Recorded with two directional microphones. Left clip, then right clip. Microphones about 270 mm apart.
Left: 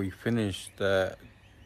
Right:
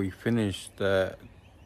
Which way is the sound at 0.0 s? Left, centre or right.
Centre.